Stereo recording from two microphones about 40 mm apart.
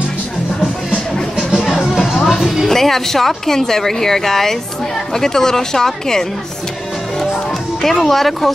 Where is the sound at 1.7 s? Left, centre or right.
Centre.